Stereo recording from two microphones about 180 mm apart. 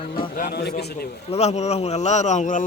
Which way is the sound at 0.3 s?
60° left (ahead or behind).